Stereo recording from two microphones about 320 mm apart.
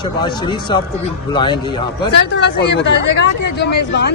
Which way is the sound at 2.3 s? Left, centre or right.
Left.